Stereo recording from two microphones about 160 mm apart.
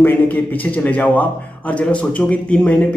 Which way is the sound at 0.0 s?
10° left (ahead or behind).